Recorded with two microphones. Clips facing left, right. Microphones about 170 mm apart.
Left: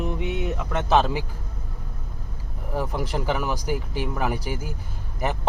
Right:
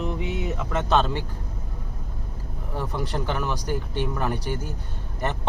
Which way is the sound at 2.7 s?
10° left (ahead or behind).